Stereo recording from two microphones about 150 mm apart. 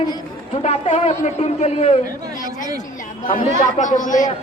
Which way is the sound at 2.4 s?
60° left (ahead or behind).